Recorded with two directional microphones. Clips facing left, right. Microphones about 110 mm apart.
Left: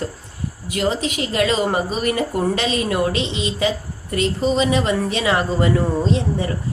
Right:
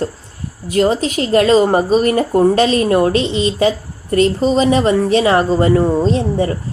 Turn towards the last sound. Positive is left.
turn(degrees=-35)  # may be behind; listen again after turning